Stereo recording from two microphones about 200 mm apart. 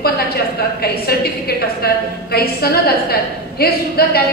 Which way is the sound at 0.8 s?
50° left (ahead or behind).